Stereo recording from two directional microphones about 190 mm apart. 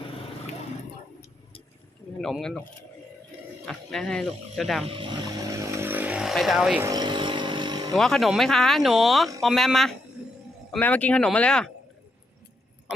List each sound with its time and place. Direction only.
2.2 s speech: centre (ahead or behind)
3.7 s speech: 5° left (ahead or behind)
4.9 s vehicle: 25° right (ahead or behind); by 6.8 s 5° right (ahead or behind)
6.8 s vehicle: 20° right (ahead or behind)
7.9 s speech: centre (ahead or behind)